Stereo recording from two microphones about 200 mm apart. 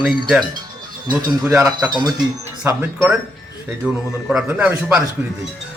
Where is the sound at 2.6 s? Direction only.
10° right (ahead or behind).